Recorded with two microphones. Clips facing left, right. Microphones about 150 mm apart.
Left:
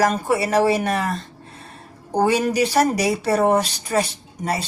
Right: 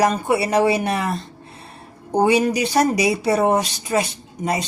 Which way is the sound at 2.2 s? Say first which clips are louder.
Right 1 dB; 15° right (ahead or behind).